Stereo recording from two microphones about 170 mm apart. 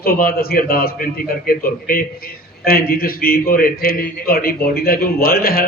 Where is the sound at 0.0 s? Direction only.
60° left (ahead or behind).